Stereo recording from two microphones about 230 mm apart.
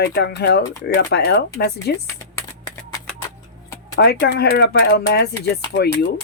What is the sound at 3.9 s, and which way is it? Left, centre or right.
Speech, left.